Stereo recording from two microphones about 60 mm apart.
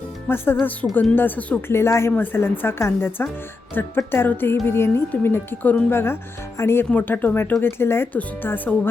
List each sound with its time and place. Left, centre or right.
0.3 s speech: left
1.1 s speech: left
1.6 s speech: left
6.9 s speech: left
7.6 s speech: left
8.1 s speech: left